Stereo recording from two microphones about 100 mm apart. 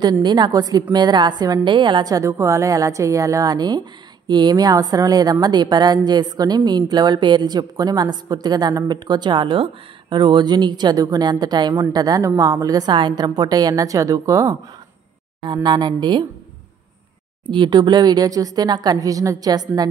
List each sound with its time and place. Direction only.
0.0 s a woman's voice: 50° right (ahead or behind)
2.1 s a woman's voice: 30° right (ahead or behind)
15.4 s a woman's voice: 50° right (ahead or behind)
17.5 s a woman's voice: 50° right (ahead or behind)